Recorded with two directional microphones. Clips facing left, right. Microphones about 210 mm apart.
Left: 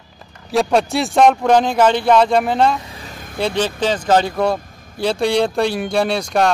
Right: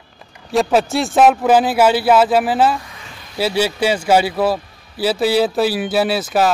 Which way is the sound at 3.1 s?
45° left (ahead or behind).